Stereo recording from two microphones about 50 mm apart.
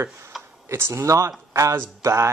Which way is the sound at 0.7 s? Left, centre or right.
Right.